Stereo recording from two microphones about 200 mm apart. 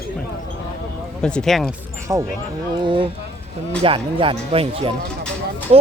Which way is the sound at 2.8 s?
25° right (ahead or behind).